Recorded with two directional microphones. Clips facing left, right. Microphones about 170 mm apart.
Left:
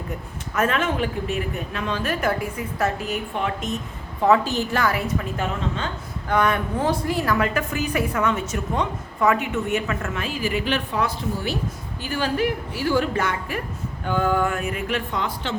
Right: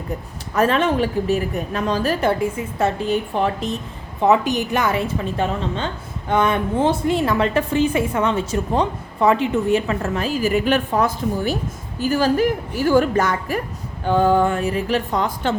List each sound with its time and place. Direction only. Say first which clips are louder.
0.5 s a woman's voice: right 5 dB; 35° right (ahead or behind)
4.2 s a woman's voice: right 2 dB; 20° right (ahead or behind); by 15.5 s 40° right (ahead or behind)